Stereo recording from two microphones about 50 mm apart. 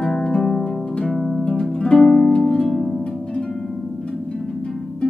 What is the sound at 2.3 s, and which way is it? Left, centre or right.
Harp, centre.